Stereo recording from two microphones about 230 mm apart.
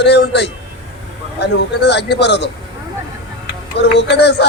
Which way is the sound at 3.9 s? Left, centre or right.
Left.